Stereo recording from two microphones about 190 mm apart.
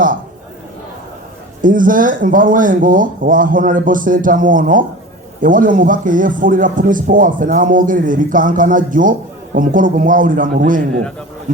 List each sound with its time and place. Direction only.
1.6 s a man's voice: 45° right (ahead or behind)